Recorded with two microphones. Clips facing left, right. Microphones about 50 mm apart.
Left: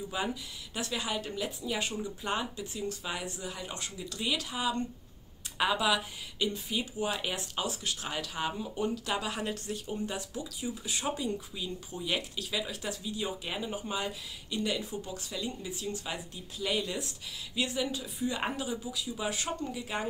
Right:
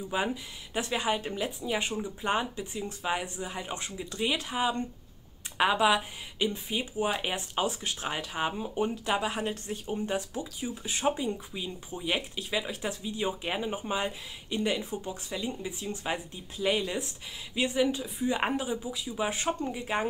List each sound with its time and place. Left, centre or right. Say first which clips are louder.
0.1 s speech: right 6 dB; right